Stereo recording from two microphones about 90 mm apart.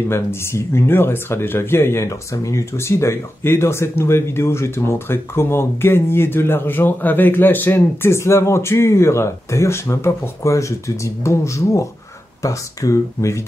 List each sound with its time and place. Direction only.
0.1 s speech: 30° left (ahead or behind)